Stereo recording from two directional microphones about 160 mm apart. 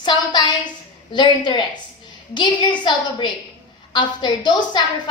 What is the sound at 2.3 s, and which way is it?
A woman's voice, 30° left (ahead or behind).